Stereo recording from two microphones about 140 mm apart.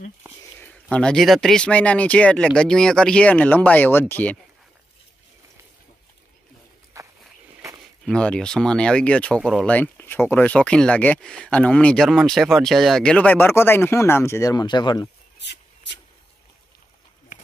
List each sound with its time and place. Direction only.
0.6 s speech: 10° left (ahead or behind)
7.0 s walk: 20° right (ahead or behind)
8.0 s speech: 5° left (ahead or behind)
9.4 s speech: 5° right (ahead or behind)
9.7 s speech: 15° left (ahead or behind); by 15.0 s 30° left (ahead or behind)